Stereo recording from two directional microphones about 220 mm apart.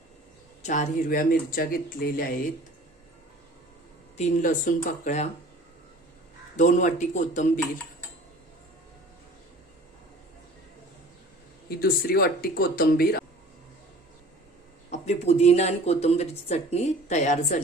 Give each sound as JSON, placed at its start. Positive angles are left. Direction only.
{"t": 0.6, "sound": "speech", "side_deg": 35}
{"t": 4.2, "sound": "speech", "side_deg": 35}
{"t": 6.6, "sound": "speech", "side_deg": 35}
{"t": 11.8, "sound": "speech", "side_deg": 45}
{"t": 14.8, "sound": "speech", "side_deg": 30}